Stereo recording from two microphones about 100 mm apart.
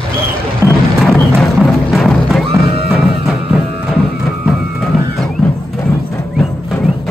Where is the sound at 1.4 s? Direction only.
Centre (ahead or behind).